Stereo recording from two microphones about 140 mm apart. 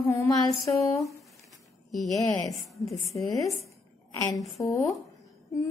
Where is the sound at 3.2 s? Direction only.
25° left (ahead or behind).